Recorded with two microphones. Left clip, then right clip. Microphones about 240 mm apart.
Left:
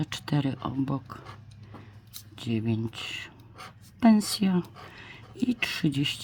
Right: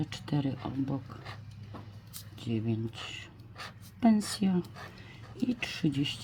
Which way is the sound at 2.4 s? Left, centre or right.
Left.